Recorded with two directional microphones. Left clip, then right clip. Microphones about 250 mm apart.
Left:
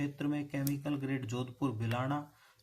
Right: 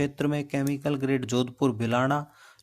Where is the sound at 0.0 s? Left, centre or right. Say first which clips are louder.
Right 9 dB; right.